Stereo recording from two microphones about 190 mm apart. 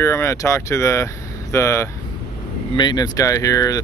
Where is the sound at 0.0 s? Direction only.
15° left (ahead or behind).